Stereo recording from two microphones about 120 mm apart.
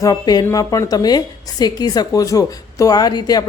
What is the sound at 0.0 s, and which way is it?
A woman's voice, 30° left (ahead or behind).